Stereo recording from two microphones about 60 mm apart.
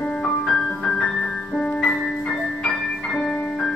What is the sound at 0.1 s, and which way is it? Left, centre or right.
Music, centre.